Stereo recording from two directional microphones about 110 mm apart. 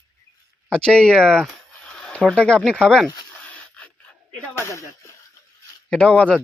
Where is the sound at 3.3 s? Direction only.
15° left (ahead or behind).